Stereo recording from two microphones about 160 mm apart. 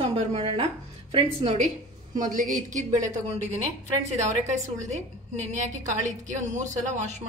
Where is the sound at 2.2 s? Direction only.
55° right (ahead or behind).